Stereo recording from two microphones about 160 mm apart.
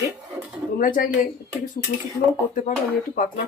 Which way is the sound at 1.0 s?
60° left (ahead or behind).